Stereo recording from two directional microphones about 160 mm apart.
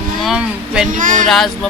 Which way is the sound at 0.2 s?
5° right (ahead or behind).